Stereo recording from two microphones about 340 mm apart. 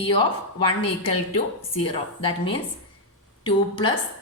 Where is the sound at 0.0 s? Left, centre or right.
Centre.